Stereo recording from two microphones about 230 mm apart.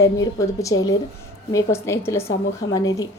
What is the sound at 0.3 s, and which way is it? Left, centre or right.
A woman's voice, centre.